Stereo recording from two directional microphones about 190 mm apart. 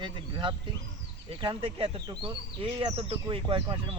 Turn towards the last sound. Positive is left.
turn(degrees=-25)  # may be behind; listen again after turning